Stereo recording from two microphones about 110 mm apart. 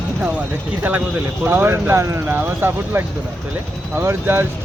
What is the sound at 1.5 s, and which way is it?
Speech, 20° right (ahead or behind).